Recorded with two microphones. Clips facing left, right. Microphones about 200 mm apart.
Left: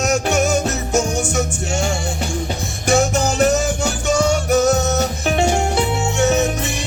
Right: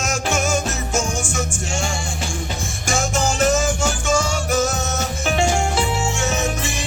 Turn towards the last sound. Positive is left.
turn(degrees=65)  # may be behind; listen again after turning